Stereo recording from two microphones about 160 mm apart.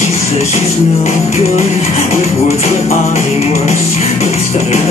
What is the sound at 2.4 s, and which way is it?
Music, 45° left (ahead or behind).